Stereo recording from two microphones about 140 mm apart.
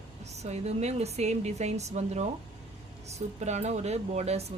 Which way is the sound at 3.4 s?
55° right (ahead or behind).